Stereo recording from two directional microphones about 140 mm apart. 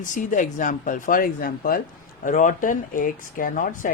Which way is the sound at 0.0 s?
65° left (ahead or behind).